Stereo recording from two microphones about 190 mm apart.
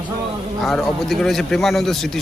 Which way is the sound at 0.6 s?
Centre (ahead or behind).